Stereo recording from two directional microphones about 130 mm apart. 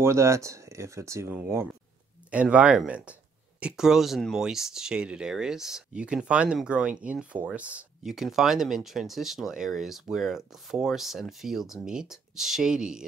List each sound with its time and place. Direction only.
0.0 s speech: 20° right (ahead or behind); by 13.0 s 5° right (ahead or behind)